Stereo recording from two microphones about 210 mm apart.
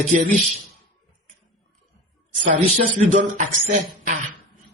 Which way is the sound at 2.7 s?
35° right (ahead or behind).